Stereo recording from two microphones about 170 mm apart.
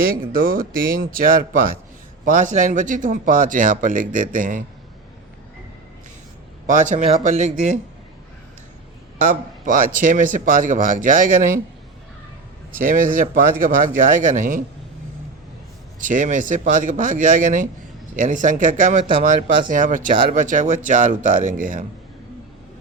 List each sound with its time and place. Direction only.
0.0 s speech: 55° right (ahead or behind)
6.7 s speech: 50° right (ahead or behind)
9.2 s speech: 50° right (ahead or behind)
12.8 s speech: 55° right (ahead or behind)
16.0 s speech: 50° right (ahead or behind)